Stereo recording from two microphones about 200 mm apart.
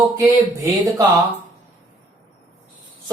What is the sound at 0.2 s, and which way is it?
Speech, 20° right (ahead or behind).